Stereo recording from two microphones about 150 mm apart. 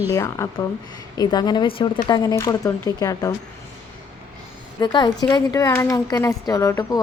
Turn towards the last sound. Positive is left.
turn(degrees=20)  # may be behind; listen again after turning